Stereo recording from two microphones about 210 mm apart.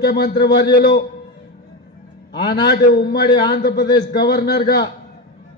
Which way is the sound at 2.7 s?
50° left (ahead or behind).